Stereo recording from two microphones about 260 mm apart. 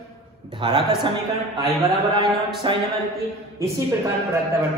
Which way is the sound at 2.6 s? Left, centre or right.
Centre.